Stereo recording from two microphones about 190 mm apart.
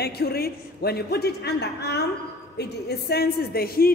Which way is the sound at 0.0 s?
55° left (ahead or behind).